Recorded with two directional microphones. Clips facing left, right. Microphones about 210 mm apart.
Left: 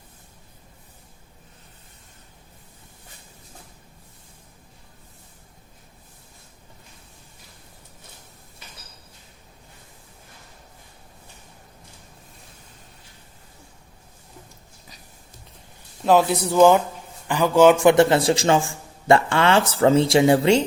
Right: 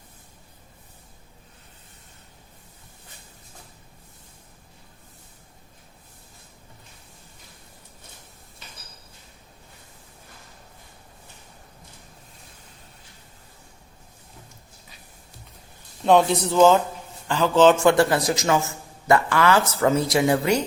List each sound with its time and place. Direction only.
16.0 s speech: 5° left (ahead or behind); by 20.7 s 25° left (ahead or behind)